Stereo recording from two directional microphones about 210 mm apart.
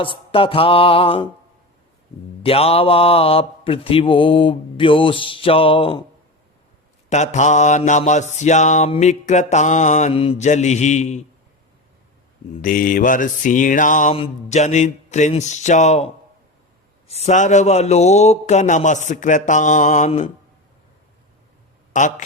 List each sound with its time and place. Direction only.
0.0 s a man's voice: 25° left (ahead or behind)
2.4 s a man's voice: 30° left (ahead or behind)
7.1 s mantra: 35° left (ahead or behind)
12.6 s mantra: 40° left (ahead or behind)
17.1 s mantra: 30° left (ahead or behind)
21.9 s mantra: 35° left (ahead or behind)